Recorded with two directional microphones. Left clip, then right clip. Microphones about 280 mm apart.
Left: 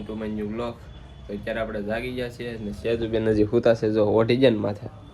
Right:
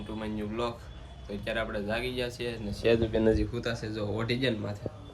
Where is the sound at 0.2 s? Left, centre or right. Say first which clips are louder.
Left 2 dB; centre.